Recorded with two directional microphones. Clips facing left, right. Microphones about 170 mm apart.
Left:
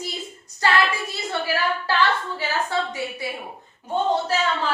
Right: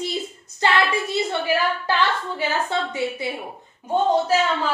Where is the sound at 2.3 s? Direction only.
25° right (ahead or behind).